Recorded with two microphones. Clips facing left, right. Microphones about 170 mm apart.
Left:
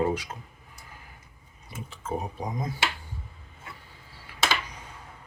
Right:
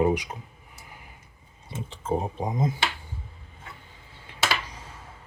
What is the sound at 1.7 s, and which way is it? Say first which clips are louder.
Speech: right 5 dB; 30° right (ahead or behind).